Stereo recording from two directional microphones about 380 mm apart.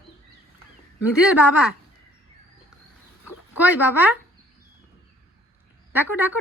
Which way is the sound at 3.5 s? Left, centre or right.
Centre.